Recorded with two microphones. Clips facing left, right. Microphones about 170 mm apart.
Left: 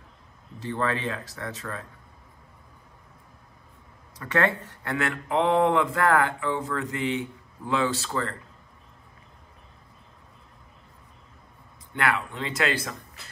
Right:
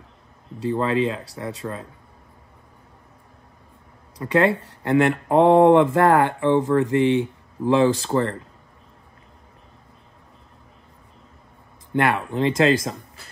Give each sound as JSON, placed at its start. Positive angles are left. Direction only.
{"t": 0.7, "sound": "speech", "side_deg": -20}
{"t": 4.2, "sound": "speech", "side_deg": -20}
{"t": 7.6, "sound": "speech", "side_deg": -30}
{"t": 11.9, "sound": "speech", "side_deg": -25}